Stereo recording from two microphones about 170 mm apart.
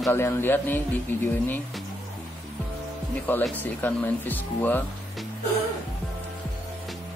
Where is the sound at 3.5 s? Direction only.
10° left (ahead or behind).